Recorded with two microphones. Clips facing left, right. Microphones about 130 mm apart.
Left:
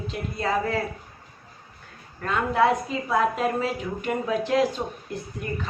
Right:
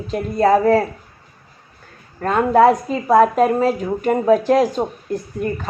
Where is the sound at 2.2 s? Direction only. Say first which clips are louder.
Right 9 dB; 45° right (ahead or behind).